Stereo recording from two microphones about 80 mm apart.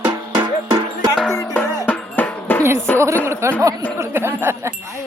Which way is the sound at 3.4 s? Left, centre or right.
Right.